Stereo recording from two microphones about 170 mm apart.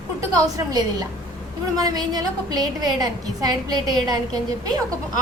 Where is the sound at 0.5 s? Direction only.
25° right (ahead or behind).